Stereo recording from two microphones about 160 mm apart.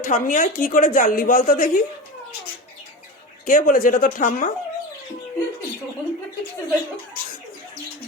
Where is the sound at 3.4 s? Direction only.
55° left (ahead or behind).